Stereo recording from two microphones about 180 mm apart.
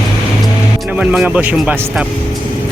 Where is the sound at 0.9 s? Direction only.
5° right (ahead or behind).